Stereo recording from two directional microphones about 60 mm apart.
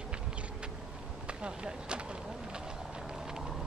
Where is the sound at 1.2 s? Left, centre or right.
Centre.